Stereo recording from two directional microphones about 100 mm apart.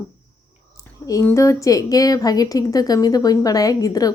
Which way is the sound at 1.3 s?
30° left (ahead or behind).